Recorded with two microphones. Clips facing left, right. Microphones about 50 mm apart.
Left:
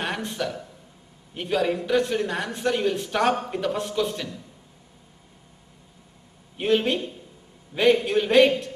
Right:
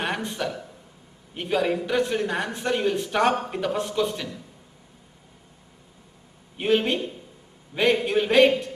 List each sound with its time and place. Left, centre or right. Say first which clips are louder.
0.0 s a sound: right 1 dB; centre
1.3 s a man's voice: even; centre
6.5 s a man's voice: even; centre